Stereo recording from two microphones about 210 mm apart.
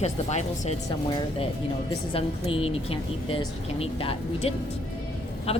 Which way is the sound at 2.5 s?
25° left (ahead or behind).